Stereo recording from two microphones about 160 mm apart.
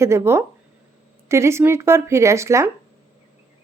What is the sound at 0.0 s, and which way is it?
Speech, 15° right (ahead or behind).